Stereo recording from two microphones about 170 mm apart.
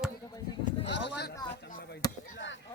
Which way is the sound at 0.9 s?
85° left.